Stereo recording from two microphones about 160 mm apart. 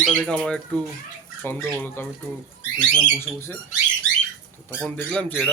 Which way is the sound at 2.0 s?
15° left (ahead or behind).